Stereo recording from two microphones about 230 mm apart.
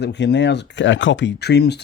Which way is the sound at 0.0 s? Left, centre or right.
Left.